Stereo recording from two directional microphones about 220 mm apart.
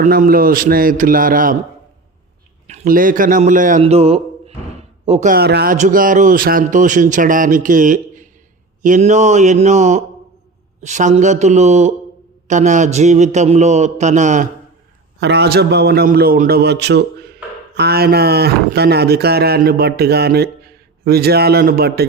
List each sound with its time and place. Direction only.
0.0 s speech: 40° right (ahead or behind)
2.6 s a man's voice: 35° right (ahead or behind)
5.7 s speech: 35° right (ahead or behind)
15.2 s speech: 50° right (ahead or behind)